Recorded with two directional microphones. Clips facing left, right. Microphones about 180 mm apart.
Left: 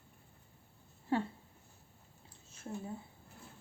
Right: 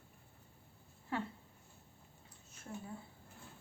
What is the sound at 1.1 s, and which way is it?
Speech, 30° left (ahead or behind).